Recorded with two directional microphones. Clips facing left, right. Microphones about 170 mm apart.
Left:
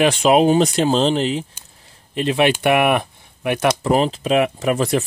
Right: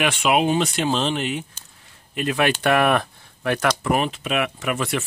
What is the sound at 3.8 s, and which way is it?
Speech, 30° left (ahead or behind).